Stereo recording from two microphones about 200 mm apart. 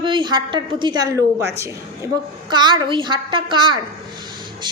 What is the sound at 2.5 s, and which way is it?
A woman's voice, 20° right (ahead or behind).